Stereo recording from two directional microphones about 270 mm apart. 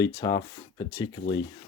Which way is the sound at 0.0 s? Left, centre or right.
Centre.